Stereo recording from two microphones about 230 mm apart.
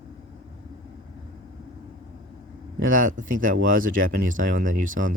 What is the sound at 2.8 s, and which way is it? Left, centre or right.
Speech, right.